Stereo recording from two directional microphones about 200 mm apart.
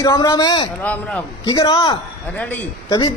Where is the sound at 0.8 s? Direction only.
5° left (ahead or behind).